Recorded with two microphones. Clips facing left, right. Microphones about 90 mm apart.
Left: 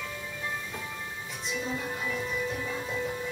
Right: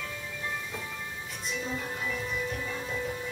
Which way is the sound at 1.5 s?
5° left (ahead or behind).